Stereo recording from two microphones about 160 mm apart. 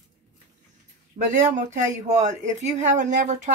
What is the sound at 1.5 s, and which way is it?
Speech, 50° right (ahead or behind).